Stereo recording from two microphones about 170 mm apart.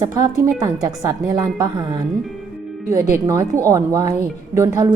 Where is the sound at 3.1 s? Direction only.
15° right (ahead or behind).